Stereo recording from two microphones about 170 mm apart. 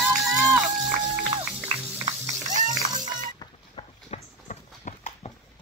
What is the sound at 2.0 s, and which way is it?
Music, 45° right (ahead or behind).